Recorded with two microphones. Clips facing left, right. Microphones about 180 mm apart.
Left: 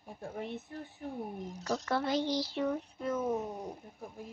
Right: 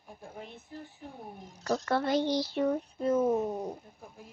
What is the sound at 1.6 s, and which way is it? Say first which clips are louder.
Speech: right 4 dB; 55° right (ahead or behind).